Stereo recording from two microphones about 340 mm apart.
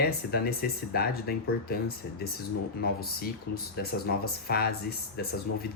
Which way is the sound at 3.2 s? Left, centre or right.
Left.